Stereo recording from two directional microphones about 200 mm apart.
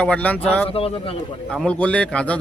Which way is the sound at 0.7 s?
30° left (ahead or behind).